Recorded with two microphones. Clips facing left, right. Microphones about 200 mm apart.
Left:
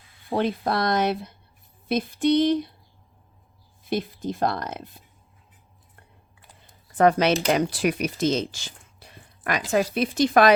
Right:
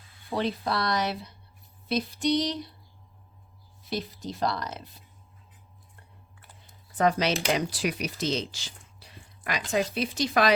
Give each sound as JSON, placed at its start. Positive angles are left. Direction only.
{"t": 0.3, "sound": "speech", "side_deg": 50}
{"t": 3.8, "sound": "speech", "side_deg": 50}
{"t": 6.9, "sound": "speech", "side_deg": 55}
{"t": 9.0, "sound": "a sound", "side_deg": 50}
{"t": 9.7, "sound": "speech", "side_deg": 55}